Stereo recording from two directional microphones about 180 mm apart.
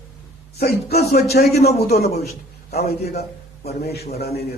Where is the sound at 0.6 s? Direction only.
60° left (ahead or behind).